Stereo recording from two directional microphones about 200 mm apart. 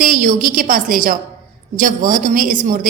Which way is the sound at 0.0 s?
40° right (ahead or behind).